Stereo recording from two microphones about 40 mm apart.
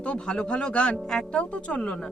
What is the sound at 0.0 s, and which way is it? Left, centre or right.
Speech, left.